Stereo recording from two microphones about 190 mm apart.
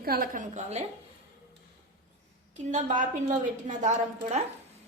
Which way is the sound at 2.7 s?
40° right (ahead or behind).